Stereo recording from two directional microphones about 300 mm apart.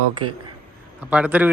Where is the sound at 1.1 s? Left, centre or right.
Centre.